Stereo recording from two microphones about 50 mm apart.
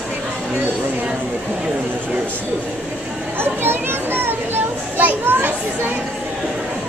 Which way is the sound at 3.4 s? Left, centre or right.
Right.